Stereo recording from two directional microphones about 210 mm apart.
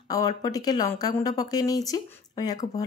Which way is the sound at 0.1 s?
15° left (ahead or behind).